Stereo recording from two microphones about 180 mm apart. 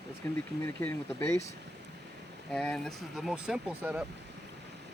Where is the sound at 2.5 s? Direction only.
5° left (ahead or behind).